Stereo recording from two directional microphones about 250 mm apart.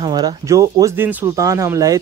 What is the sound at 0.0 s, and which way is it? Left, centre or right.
Speech, centre.